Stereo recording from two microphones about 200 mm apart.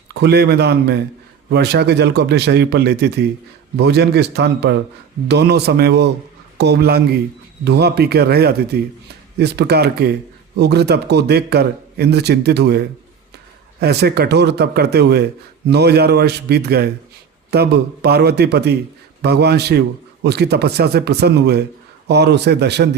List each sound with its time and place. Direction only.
0.1 s a man's voice: 55° right (ahead or behind)